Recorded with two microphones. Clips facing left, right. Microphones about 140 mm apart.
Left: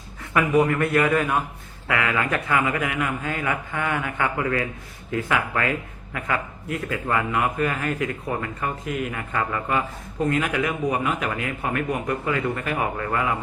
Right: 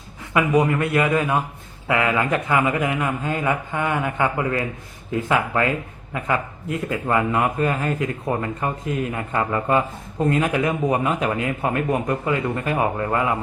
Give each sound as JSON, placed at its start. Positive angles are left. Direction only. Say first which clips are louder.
{"t": 0.3, "sound": "a man's voice", "louder": "right 1 dB", "side_deg": -15}